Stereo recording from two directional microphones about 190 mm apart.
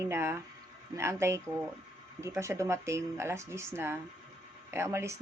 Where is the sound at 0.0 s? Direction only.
15° right (ahead or behind).